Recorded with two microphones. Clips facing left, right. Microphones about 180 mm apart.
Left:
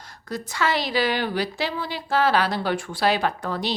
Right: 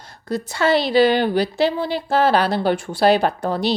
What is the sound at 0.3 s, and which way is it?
A woman's voice, 30° right (ahead or behind).